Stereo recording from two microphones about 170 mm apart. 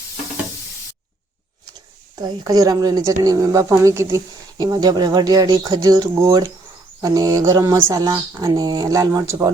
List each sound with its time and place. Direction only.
2.1 s speech: 25° right (ahead or behind)